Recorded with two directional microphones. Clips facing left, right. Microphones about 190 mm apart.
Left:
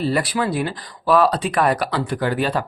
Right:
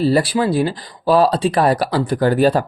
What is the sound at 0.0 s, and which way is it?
Speech, 35° right (ahead or behind).